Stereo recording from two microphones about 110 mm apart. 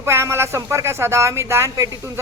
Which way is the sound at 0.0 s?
25° right (ahead or behind).